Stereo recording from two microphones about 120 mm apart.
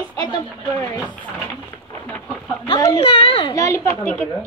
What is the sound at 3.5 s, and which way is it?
Speech, 25° left (ahead or behind).